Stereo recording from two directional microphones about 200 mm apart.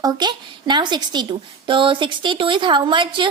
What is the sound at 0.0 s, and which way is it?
A woman's voice, 20° right (ahead or behind).